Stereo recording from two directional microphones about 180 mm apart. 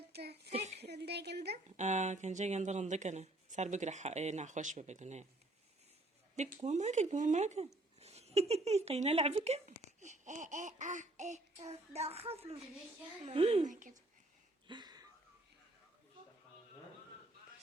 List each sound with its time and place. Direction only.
0.1 s a sound: 65° right (ahead or behind)
0.8 s speech: 65° right (ahead or behind)
1.7 s speech: 40° right (ahead or behind)
6.3 s speech: 40° right (ahead or behind)
13.7 s speech: 45° right (ahead or behind)
14.7 s a sound: 25° right (ahead or behind)